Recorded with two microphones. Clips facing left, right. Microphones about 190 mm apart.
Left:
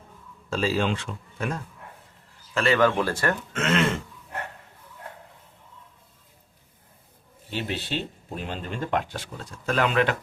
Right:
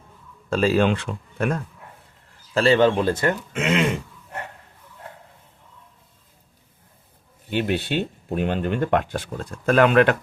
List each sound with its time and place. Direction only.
0.5 s speech: 55° right (ahead or behind)
2.5 s speech: 30° right (ahead or behind); by 4.0 s 15° right (ahead or behind)
7.5 s speech: 60° right (ahead or behind)